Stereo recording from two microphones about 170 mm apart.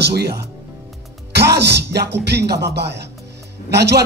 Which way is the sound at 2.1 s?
80° right.